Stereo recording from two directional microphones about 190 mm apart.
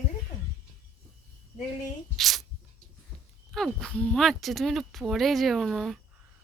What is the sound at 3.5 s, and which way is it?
Speech, centre (ahead or behind).